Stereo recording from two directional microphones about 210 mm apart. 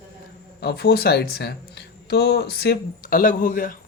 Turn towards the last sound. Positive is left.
turn(degrees=40)  # may be behind; listen again after turning